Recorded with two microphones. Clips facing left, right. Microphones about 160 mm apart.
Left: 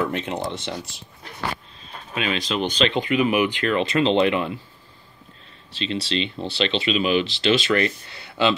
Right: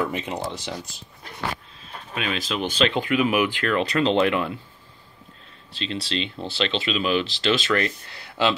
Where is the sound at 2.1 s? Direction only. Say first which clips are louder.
Left 3 dB; centre (ahead or behind).